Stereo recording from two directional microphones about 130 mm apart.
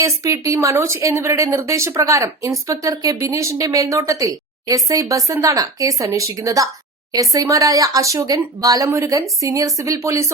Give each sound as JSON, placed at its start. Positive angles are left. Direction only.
{"t": 0.0, "sound": "speech", "side_deg": -25}